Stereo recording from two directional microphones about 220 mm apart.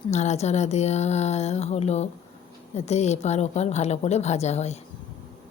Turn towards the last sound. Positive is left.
turn(degrees=30)  # may be behind; listen again after turning